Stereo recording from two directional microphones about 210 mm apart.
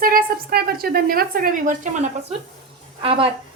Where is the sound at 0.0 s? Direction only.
45° right (ahead or behind).